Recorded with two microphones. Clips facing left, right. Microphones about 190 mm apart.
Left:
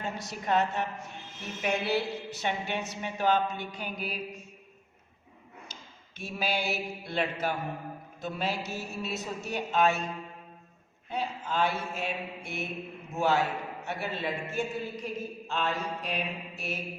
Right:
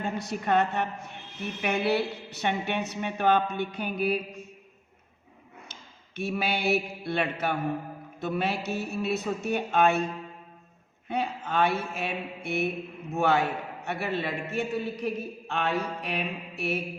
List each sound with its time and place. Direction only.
0.0 s a woman's voice: 55° right (ahead or behind)
6.1 s a man's voice: 65° right (ahead or behind)
11.1 s a man's voice: 60° right (ahead or behind)